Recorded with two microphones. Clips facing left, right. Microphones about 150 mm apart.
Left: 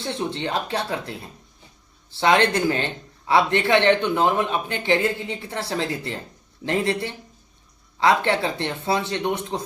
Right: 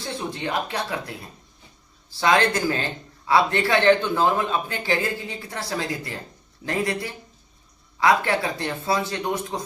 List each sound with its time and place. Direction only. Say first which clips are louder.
0.0 s a man's voice: left 3 dB; 25° left (ahead or behind)
2.1 s a man's voice: left 2 dB; 25° left (ahead or behind)